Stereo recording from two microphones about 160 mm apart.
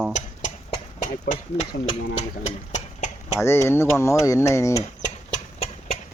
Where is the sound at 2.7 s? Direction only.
50° left (ahead or behind).